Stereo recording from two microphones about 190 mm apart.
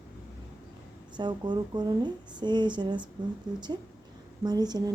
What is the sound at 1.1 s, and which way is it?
A woman's voice, 25° right (ahead or behind).